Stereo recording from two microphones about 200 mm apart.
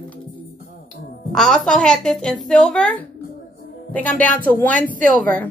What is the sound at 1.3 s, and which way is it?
A woman's voice, 5° left (ahead or behind).